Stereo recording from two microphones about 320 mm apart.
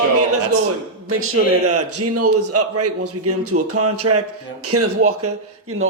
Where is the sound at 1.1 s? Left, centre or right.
Right.